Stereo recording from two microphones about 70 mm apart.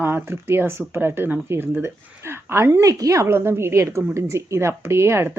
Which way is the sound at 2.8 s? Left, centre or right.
Right.